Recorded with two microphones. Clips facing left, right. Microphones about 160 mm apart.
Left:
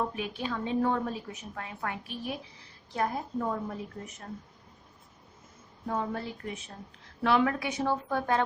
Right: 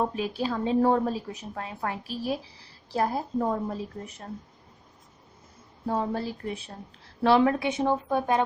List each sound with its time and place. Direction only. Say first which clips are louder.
0.0 s a woman's voice: right 5 dB; 35° right (ahead or behind)
5.8 s a woman's voice: right 4 dB; 30° right (ahead or behind); by 8.4 s 15° right (ahead or behind)